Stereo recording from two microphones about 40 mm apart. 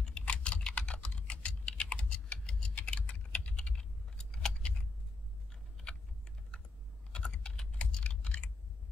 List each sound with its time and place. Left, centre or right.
0.2 s typing: left
2.3 s typing: centre
2.8 s typing: left
6.5 s typing: left